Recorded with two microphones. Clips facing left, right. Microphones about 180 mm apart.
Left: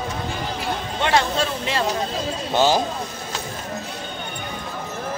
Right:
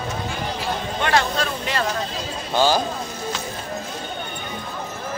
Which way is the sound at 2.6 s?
25° left (ahead or behind).